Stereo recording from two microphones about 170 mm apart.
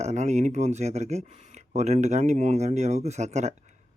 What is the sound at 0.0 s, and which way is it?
Speech, 40° right (ahead or behind).